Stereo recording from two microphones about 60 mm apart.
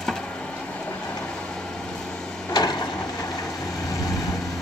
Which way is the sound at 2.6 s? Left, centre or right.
Left.